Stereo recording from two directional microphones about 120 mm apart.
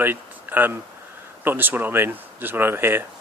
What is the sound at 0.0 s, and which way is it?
Speech, 15° right (ahead or behind).